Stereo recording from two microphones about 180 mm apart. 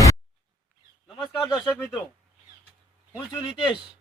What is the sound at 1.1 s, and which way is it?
Speech, centre (ahead or behind).